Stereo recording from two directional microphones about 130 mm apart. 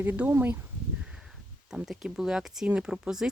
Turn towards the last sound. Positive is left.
turn(degrees=-5)  # may be behind; listen again after turning